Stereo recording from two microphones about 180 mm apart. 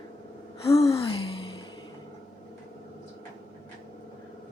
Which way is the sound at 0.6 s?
35° left (ahead or behind).